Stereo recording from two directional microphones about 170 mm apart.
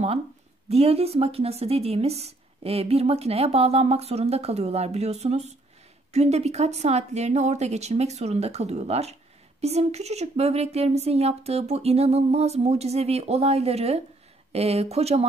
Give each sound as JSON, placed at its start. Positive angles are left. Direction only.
{"t": 0.7, "sound": "a woman's voice", "side_deg": -35}